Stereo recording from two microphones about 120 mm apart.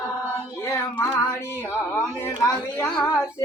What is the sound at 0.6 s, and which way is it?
Music, 25° left (ahead or behind).